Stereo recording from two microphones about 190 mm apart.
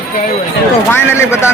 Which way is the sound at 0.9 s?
10° left (ahead or behind).